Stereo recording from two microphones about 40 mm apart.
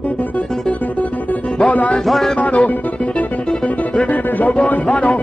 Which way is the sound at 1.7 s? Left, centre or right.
Left.